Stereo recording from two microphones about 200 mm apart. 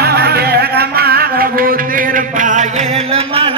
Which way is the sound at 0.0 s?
50° right (ahead or behind).